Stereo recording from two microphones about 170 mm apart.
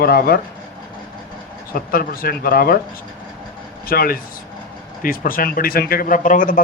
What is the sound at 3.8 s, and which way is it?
Speech, 60° left (ahead or behind).